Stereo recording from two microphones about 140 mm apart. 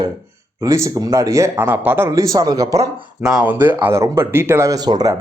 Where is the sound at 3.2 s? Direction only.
10° right (ahead or behind); by 5.1 s 30° right (ahead or behind).